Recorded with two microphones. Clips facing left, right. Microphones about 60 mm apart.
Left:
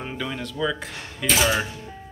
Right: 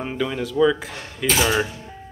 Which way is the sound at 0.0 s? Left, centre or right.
Centre.